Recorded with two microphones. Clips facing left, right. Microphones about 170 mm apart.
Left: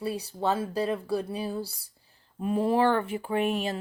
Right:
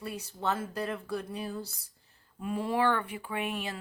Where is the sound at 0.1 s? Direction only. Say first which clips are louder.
Left 4 dB; 30° left (ahead or behind).